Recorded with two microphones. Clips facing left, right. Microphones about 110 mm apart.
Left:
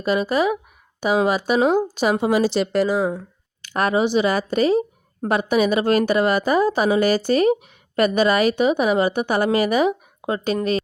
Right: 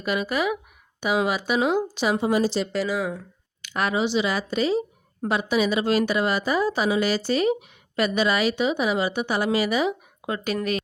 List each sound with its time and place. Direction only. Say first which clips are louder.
0.0 s a woman's voice: left 5 dB; 35° left (ahead or behind)
2.2 s a woman's voice: left 3 dB; 70° left (ahead or behind)
3.6 s a woman's voice: left 5 dB; 40° left (ahead or behind)
10.2 s speech: left 5 dB; 30° left (ahead or behind)